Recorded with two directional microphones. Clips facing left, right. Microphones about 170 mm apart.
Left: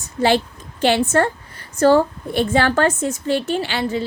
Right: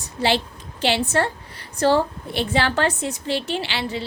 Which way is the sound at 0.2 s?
50° left (ahead or behind).